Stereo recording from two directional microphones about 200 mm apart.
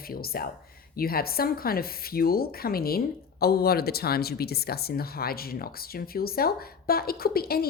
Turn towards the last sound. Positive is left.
turn(degrees=50)  # may be behind; listen again after turning